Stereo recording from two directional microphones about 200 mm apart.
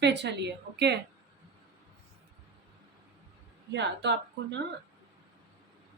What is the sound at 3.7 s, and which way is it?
Speech, 60° right (ahead or behind).